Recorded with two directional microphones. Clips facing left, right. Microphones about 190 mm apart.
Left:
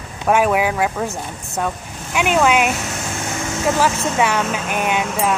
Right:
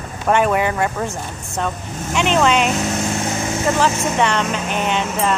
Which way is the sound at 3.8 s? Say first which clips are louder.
Even; 5° left (ahead or behind).